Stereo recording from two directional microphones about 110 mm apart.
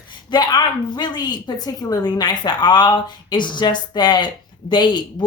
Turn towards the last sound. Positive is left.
turn(degrees=45)  # may be behind; listen again after turning